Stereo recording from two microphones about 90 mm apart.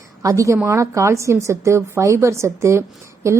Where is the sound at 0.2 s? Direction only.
35° right (ahead or behind).